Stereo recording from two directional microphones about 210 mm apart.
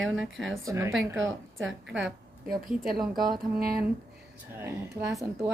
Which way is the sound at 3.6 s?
45° right (ahead or behind).